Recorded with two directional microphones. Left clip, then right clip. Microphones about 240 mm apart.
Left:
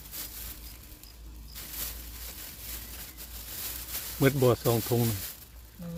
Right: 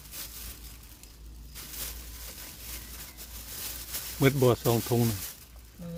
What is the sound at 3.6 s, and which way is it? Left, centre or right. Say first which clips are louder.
Speech: right 1 dB; centre.